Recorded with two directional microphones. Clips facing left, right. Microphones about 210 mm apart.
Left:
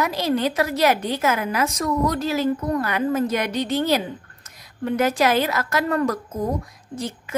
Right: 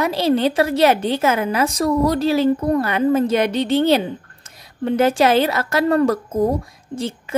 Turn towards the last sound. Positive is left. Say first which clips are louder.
# right 4 dB
turn(degrees=-25)  # may be behind; listen again after turning